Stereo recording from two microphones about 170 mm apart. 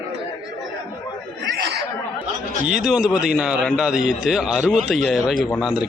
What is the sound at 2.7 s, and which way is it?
A man's voice, 5° right (ahead or behind).